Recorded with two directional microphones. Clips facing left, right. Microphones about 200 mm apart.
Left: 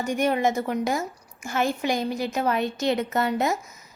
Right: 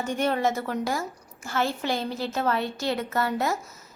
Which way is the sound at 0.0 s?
10° left (ahead or behind).